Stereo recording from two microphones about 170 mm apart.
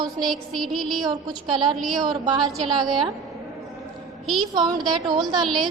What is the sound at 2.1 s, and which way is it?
A woman's voice, 25° right (ahead or behind).